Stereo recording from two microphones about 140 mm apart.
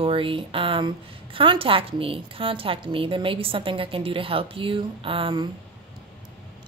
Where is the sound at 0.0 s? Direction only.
40° right (ahead or behind).